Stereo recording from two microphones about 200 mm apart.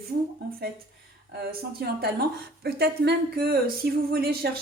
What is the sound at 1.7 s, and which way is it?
A woman's voice, 50° right (ahead or behind).